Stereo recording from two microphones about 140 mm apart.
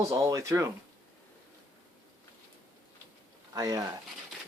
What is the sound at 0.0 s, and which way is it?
Speech, 25° right (ahead or behind).